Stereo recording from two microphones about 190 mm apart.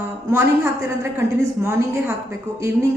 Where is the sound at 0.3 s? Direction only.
15° right (ahead or behind).